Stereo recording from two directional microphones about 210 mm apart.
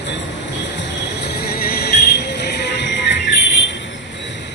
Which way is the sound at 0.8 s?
50° left (ahead or behind).